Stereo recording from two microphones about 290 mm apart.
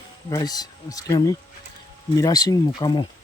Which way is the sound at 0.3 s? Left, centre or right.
Centre.